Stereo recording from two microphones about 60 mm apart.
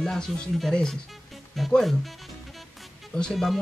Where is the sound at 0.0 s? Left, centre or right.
Centre.